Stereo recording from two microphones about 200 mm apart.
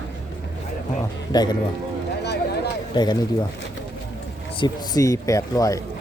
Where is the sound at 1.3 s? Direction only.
20° left (ahead or behind).